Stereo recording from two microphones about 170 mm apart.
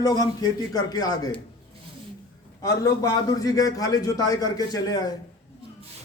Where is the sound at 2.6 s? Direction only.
20° left (ahead or behind).